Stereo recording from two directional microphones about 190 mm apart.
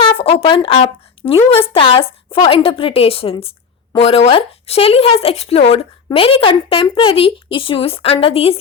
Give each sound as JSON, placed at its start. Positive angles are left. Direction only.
{"t": 0.0, "sound": "a woman's voice", "side_deg": 30}